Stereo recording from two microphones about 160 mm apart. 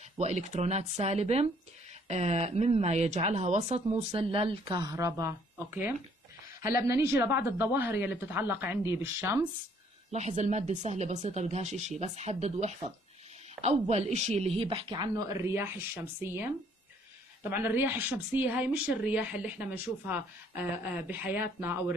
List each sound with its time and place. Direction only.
0.2 s speech: 45° right (ahead or behind); by 9.5 s 15° right (ahead or behind)
10.1 s speech: 45° right (ahead or behind); by 21.9 s 15° right (ahead or behind)